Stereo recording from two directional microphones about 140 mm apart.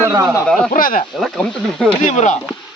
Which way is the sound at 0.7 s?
80° left.